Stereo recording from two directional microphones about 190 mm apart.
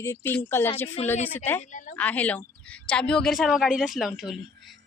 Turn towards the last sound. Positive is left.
turn(degrees=0)  # may be behind; listen again after turning